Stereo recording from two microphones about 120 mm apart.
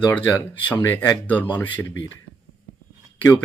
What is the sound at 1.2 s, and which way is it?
Speech, 15° left (ahead or behind).